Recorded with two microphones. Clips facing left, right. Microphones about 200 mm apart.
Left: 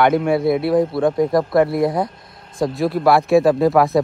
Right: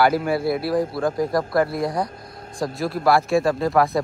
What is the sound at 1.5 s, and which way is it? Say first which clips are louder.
Speech: left 5 dB; 25° left (ahead or behind).